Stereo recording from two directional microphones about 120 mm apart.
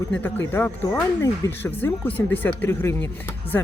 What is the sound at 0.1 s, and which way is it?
Speech, 15° left (ahead or behind).